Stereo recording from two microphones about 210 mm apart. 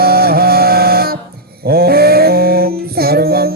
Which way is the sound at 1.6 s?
45° right (ahead or behind).